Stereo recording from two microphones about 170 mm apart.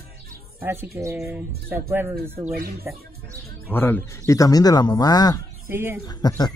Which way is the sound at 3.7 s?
10° left (ahead or behind).